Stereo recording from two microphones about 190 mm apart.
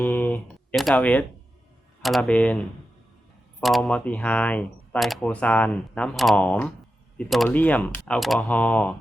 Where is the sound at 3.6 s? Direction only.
Centre (ahead or behind).